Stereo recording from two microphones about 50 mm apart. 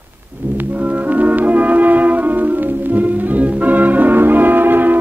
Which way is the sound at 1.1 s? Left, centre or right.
Right.